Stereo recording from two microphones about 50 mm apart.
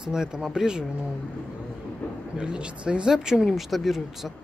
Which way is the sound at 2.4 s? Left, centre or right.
Right.